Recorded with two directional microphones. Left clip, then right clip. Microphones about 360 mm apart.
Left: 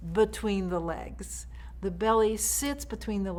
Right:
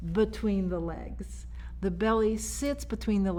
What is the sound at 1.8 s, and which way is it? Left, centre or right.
A woman's voice, right.